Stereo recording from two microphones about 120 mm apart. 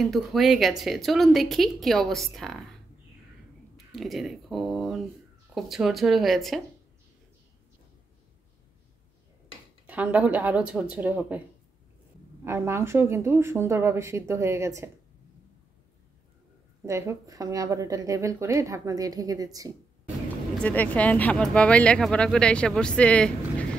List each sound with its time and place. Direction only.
0.0 s a woman's voice: centre (ahead or behind)
3.7 s a woman's voice: centre (ahead or behind)
9.8 s speech: 15° right (ahead or behind)
12.4 s a woman's voice: 20° right (ahead or behind)
16.8 s a woman's voice: 25° right (ahead or behind)
20.6 s speech: 15° left (ahead or behind)